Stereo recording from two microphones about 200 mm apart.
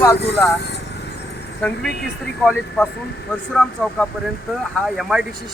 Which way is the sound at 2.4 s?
Centre (ahead or behind).